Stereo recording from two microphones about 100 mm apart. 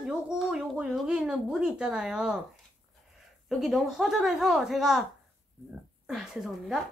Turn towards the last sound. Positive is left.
turn(degrees=0)  # may be behind; listen again after turning